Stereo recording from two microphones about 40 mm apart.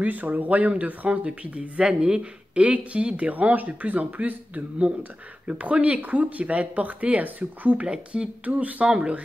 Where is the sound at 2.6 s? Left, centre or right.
Right.